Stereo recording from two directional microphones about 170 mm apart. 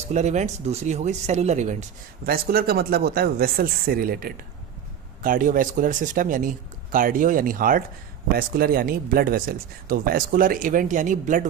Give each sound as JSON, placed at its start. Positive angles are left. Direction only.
{"t": 0.1, "sound": "speech", "side_deg": -45}
{"t": 2.2, "sound": "speech", "side_deg": -65}